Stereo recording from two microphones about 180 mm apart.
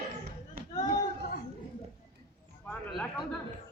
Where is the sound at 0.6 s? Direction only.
55° right (ahead or behind).